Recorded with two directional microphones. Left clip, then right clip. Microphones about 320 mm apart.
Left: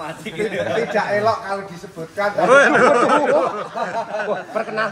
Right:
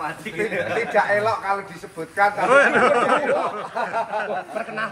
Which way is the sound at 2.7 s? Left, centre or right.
Centre.